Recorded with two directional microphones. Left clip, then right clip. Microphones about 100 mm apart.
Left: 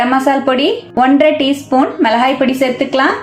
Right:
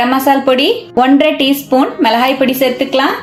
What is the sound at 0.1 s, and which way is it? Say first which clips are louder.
A woman's voice: right 2 dB; 30° right (ahead or behind).